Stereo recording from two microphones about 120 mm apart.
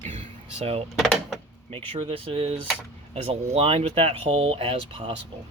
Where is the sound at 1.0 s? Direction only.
Centre (ahead or behind).